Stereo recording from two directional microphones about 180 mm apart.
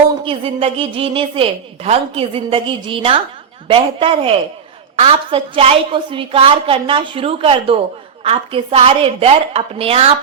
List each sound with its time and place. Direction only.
0.3 s a woman's voice: 30° right (ahead or behind)